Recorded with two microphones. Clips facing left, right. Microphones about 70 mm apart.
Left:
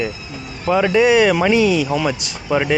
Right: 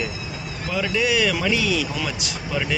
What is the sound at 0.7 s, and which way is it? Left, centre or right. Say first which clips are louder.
Speech: left 9 dB; left.